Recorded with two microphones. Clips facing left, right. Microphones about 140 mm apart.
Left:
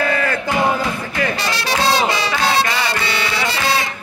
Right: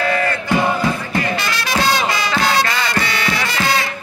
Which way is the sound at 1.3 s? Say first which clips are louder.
Even; 35° left (ahead or behind).